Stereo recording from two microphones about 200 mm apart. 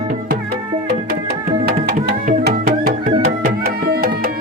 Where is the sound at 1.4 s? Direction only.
45° right (ahead or behind).